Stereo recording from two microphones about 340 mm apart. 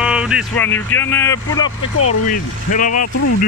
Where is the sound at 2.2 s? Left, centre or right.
Left.